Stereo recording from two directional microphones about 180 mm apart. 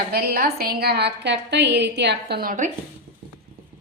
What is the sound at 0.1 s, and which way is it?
A woman's voice, 60° right (ahead or behind).